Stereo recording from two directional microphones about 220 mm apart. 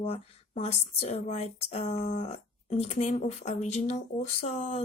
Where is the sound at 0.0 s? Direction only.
30° left (ahead or behind).